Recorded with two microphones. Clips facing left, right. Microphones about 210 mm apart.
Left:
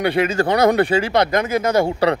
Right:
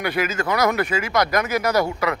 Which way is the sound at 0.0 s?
30° left (ahead or behind).